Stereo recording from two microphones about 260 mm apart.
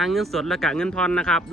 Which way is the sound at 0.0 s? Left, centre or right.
Centre.